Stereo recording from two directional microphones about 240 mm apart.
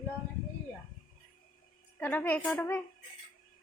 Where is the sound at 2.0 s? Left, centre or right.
Centre.